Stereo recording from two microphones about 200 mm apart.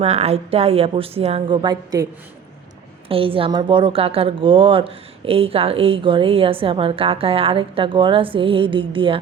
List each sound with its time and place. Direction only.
0.0 s a woman's voice: 30° right (ahead or behind)
3.1 s a woman's voice: 25° right (ahead or behind)